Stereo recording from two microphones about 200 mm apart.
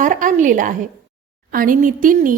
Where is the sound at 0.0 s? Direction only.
40° right (ahead or behind).